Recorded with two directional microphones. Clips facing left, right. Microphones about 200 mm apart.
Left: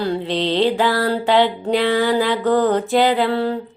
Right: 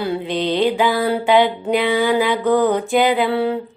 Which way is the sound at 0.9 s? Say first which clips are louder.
Right 1 dB; 15° right (ahead or behind).